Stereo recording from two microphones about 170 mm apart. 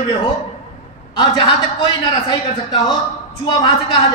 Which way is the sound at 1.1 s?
25° left (ahead or behind).